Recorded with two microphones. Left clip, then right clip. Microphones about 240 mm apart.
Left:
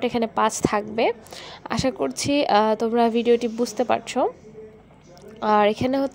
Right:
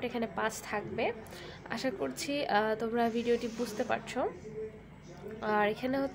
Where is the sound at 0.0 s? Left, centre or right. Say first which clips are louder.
Left 12 dB; left.